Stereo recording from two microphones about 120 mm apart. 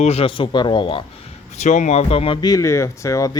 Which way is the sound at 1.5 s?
75° left (ahead or behind).